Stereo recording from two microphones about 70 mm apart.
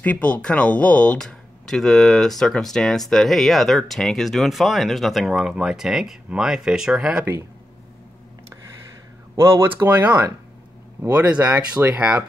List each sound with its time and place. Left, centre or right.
0.0 s speech: centre
5.5 s speech: centre
9.4 s speech: right
9.8 s speech: right